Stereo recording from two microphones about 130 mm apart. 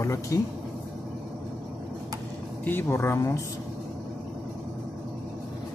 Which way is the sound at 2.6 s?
15° left (ahead or behind).